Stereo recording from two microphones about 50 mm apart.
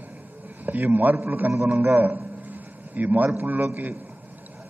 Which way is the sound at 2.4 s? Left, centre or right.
Right.